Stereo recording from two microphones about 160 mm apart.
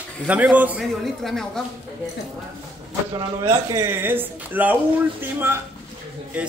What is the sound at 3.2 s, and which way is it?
Speech, 20° right (ahead or behind).